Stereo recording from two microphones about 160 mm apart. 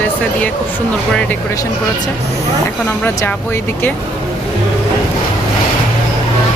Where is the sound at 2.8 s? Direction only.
10° left (ahead or behind).